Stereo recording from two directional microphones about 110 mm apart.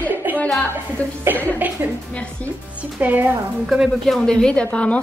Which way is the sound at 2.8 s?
15° right (ahead or behind).